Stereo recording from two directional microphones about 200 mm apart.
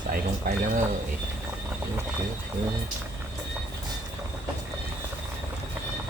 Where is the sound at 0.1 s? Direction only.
40° right (ahead or behind).